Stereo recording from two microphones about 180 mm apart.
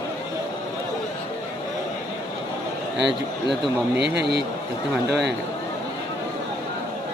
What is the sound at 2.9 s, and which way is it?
A man's voice, 75° right (ahead or behind).